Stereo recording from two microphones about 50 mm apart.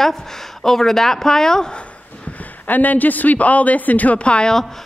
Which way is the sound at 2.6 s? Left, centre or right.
Left.